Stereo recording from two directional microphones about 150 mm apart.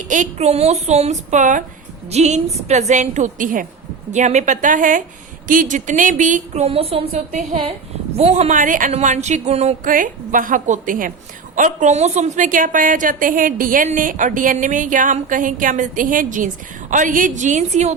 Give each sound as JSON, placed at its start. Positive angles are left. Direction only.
{"t": 0.1, "sound": "speech", "side_deg": -50}
{"t": 2.0, "sound": "speech", "side_deg": -45}
{"t": 4.1, "sound": "a woman's voice", "side_deg": -50}
{"t": 9.8, "sound": "a woman's voice", "side_deg": -65}